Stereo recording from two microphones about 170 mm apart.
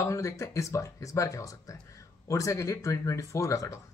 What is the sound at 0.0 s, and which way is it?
Speech, 15° left (ahead or behind).